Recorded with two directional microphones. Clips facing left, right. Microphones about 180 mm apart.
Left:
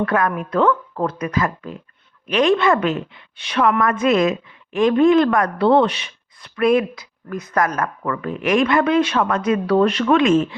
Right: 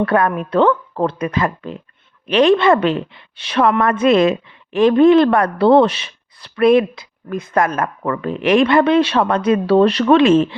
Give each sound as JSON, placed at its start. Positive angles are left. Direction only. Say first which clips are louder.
{"t": 0.0, "sound": "a woman's voice", "louder": "right 3 dB", "side_deg": -35}